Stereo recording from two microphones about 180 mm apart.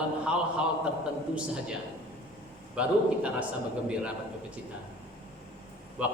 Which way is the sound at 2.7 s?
5° right (ahead or behind).